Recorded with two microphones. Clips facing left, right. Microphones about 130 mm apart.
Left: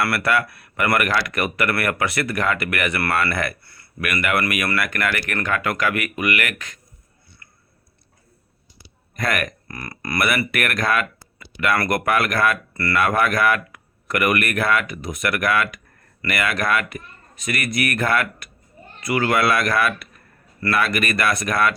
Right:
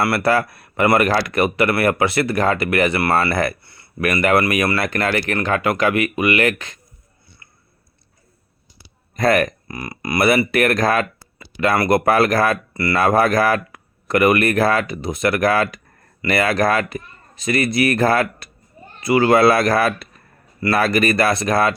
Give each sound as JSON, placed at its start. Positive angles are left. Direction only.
{"t": 0.0, "sound": "speech", "side_deg": -30}
{"t": 9.1, "sound": "speech", "side_deg": -30}
{"t": 9.6, "sound": "speech", "side_deg": -15}
{"t": 10.2, "sound": "speech", "side_deg": -30}
{"t": 12.7, "sound": "speech", "side_deg": -20}
{"t": 13.0, "sound": "speech", "side_deg": -35}